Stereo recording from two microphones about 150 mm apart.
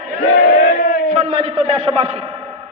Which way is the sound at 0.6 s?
60° left (ahead or behind).